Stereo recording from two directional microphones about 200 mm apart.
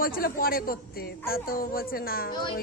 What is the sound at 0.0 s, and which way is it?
Speech, 45° left (ahead or behind).